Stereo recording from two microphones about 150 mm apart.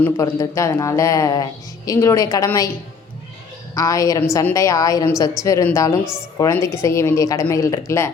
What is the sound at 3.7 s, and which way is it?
A woman's voice, 25° left (ahead or behind).